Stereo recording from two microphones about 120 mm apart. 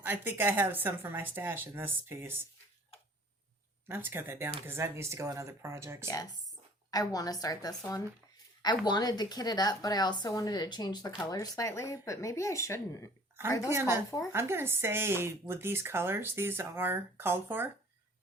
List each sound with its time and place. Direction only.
0.0 s speech: 15° right (ahead or behind)
3.8 s speech: 20° right (ahead or behind)
6.9 s speech: 30° left (ahead or behind)
13.7 s speech: 20° right (ahead or behind)